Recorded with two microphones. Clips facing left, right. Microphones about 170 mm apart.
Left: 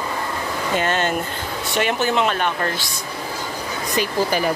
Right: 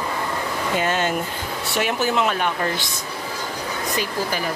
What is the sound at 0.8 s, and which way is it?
Speech, 10° right (ahead or behind).